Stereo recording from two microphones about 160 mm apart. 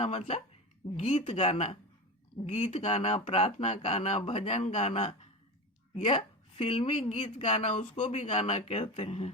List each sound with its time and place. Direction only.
0.0 s speech: 40° left (ahead or behind)
6.6 s speech: 35° left (ahead or behind)